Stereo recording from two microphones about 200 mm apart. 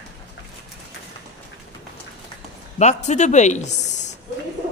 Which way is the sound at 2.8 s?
35° left (ahead or behind).